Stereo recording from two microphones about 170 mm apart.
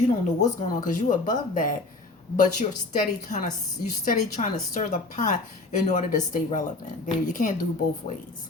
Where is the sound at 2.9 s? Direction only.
50° left (ahead or behind).